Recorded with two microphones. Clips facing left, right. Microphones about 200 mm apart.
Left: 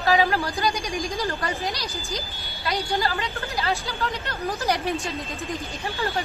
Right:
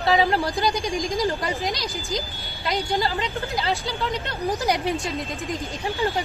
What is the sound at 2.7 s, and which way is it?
A woman's voice, 20° right (ahead or behind).